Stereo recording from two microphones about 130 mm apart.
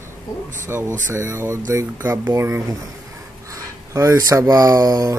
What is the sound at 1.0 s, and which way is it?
Speech, 20° right (ahead or behind).